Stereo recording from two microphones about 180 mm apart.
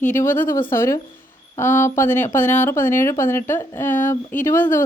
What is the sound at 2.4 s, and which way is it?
Speech, 45° left (ahead or behind).